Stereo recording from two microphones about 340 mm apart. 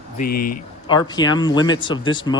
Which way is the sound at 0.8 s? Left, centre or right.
Centre.